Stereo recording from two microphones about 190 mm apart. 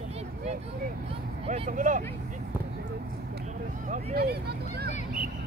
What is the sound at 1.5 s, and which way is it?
Speech, 40° right (ahead or behind).